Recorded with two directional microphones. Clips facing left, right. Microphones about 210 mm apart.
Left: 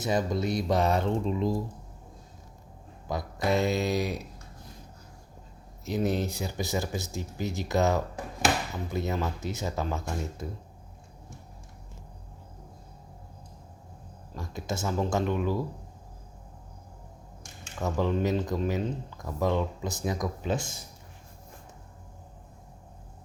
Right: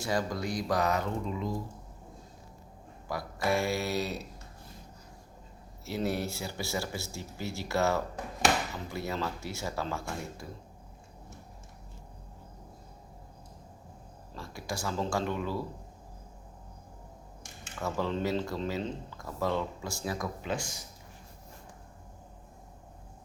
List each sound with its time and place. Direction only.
0.0 s speech: 20° left (ahead or behind)
3.1 s speech: 20° left (ahead or behind)
5.8 s speech: 20° left (ahead or behind)
14.3 s speech: 20° left (ahead or behind)
17.7 s speech: 15° left (ahead or behind)